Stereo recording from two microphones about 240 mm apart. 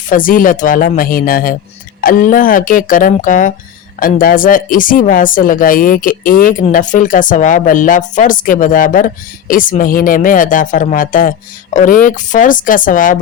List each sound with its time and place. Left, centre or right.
0.1 s speech: left